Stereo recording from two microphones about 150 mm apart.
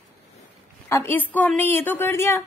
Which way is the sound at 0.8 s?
15° left (ahead or behind).